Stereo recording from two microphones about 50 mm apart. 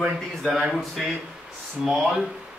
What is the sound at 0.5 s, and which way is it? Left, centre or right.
A man's voice, centre.